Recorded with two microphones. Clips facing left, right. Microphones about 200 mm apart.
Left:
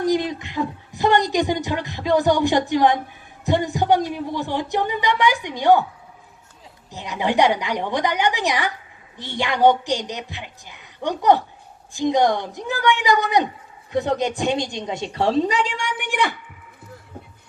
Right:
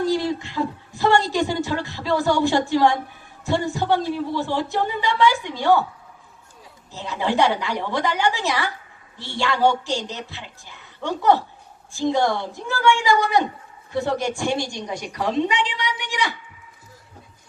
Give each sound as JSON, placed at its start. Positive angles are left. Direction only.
{"t": 0.0, "sound": "a sound", "side_deg": 15}
{"t": 3.4, "sound": "speech", "side_deg": 15}
{"t": 6.9, "sound": "a woman's voice", "side_deg": 15}